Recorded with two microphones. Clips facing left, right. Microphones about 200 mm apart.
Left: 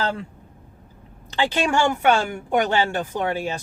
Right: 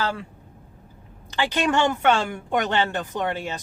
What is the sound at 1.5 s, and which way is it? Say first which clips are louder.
Speech: even; 10° left (ahead or behind).